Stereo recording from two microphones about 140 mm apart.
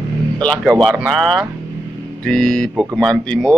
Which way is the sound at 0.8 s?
Centre (ahead or behind).